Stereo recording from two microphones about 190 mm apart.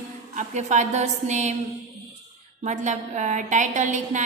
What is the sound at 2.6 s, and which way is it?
A woman's voice, 40° right (ahead or behind).